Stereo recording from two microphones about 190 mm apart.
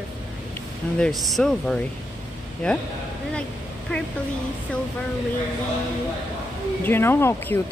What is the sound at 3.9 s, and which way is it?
Speech, 5° left (ahead or behind).